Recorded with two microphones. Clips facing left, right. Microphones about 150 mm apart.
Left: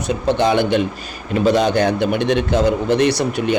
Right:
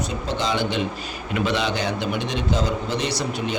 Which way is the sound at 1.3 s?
40° left (ahead or behind).